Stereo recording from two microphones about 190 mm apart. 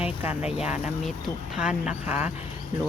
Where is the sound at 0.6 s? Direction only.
5° right (ahead or behind).